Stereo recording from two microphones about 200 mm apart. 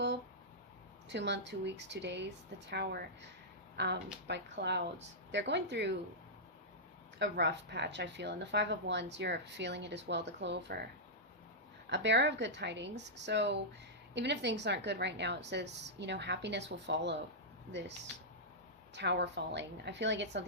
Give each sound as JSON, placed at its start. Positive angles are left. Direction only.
{"t": 1.1, "sound": "speech", "side_deg": -60}
{"t": 7.2, "sound": "speech", "side_deg": -60}
{"t": 11.9, "sound": "speech", "side_deg": -60}
{"t": 18.9, "sound": "speech", "side_deg": -60}